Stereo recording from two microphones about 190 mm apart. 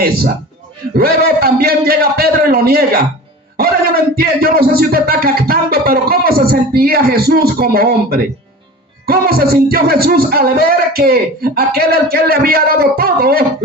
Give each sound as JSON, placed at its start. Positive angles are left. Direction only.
{"t": 0.9, "sound": "speech", "side_deg": -55}